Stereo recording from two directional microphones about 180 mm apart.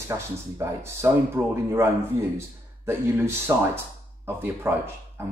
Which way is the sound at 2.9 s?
15° right (ahead or behind).